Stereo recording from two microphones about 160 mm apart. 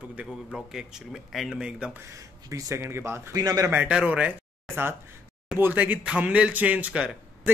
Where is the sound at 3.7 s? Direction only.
10° right (ahead or behind).